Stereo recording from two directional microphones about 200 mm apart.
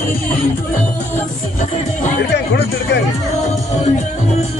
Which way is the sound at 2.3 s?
55° left (ahead or behind).